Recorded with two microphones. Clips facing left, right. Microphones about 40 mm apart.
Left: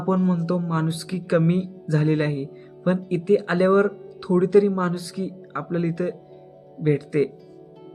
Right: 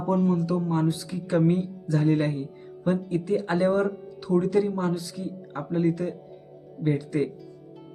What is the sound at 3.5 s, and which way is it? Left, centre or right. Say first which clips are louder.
Speech: left 3 dB; left.